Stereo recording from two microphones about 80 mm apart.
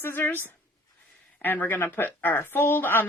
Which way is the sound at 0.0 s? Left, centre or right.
Left.